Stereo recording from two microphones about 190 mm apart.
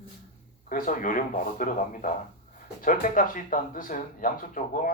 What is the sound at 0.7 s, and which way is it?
Speech, 45° left (ahead or behind).